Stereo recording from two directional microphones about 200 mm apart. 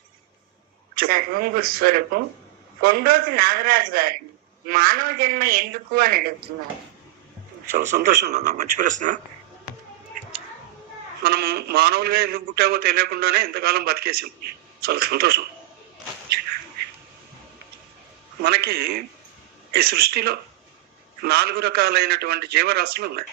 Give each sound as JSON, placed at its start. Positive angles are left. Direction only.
{"t": 0.9, "sound": "a man's voice", "side_deg": -45}
{"t": 7.7, "sound": "speech", "side_deg": -35}
{"t": 11.2, "sound": "a man's voice", "side_deg": -50}
{"t": 18.4, "sound": "a man's voice", "side_deg": -50}